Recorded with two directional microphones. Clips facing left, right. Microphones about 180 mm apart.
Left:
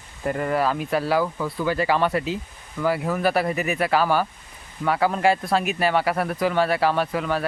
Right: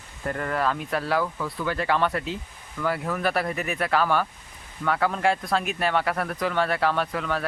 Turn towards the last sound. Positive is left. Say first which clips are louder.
# left 3 dB
turn(degrees=5)  # may be behind; listen again after turning